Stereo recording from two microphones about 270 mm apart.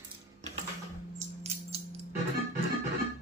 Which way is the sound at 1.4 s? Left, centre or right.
Right.